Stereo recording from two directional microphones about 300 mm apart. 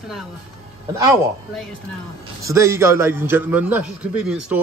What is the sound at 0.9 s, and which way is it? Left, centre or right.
A man's voice, centre.